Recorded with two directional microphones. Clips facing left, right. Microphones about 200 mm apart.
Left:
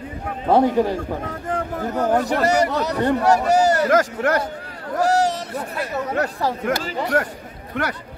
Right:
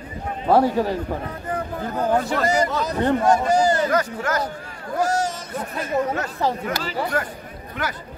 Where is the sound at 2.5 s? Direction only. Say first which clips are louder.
Left 2 dB; 70° left (ahead or behind).